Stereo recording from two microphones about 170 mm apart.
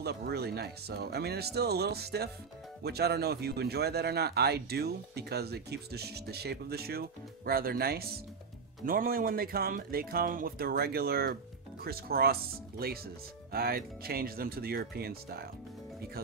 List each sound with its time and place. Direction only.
0.0 s speech: 70° right (ahead or behind)